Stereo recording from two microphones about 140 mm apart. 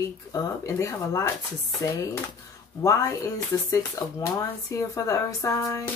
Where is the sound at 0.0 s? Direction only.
25° left (ahead or behind).